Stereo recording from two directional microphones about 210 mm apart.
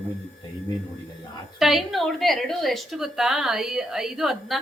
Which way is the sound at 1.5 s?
Centre (ahead or behind).